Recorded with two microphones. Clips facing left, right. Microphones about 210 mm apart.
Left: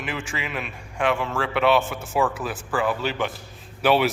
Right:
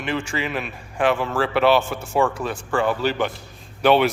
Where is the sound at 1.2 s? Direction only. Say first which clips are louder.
Right 4 dB; 35° right (ahead or behind).